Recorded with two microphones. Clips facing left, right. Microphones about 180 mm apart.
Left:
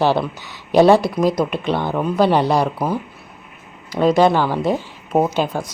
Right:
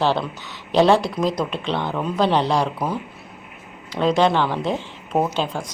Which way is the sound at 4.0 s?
10° left (ahead or behind).